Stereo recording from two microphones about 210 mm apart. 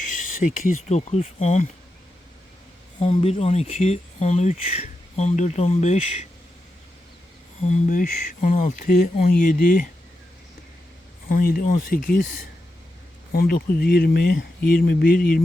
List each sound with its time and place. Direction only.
0.4 s speech: 40° left (ahead or behind)
0.9 s speech: 30° left (ahead or behind)
3.0 s speech: 25° left (ahead or behind)
7.7 s speech: 35° left (ahead or behind)
11.3 s speech: 45° left (ahead or behind)
13.3 s speech: 45° left (ahead or behind)